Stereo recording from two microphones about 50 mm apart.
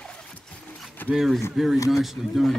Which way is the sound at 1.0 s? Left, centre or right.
Left.